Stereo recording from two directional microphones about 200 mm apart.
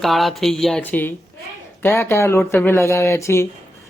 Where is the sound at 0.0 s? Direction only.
Centre (ahead or behind).